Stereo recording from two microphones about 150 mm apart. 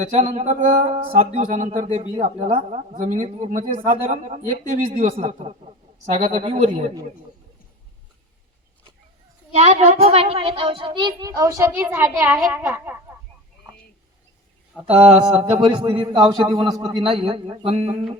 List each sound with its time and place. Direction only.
0.0 s a man's voice: 50° right (ahead or behind)
9.5 s a child's voice: 45° right (ahead or behind); by 13.1 s 15° right (ahead or behind)
14.8 s a man's voice: 40° right (ahead or behind)